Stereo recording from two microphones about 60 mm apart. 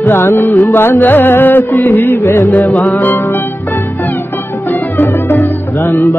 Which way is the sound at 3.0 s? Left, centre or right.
Left.